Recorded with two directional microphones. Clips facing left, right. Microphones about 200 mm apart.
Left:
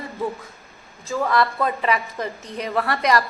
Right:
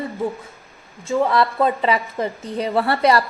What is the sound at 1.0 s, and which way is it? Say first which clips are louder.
A woman's voice: right 3 dB; 30° right (ahead or behind).